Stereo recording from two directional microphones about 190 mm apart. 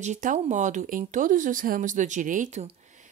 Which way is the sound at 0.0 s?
40° right (ahead or behind).